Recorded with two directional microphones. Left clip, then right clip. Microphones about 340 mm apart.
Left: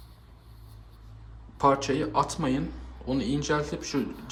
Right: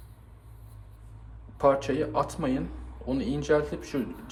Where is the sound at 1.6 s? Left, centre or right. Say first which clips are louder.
Even; centre.